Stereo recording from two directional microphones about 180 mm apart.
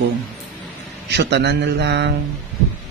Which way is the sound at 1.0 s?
75° right (ahead or behind).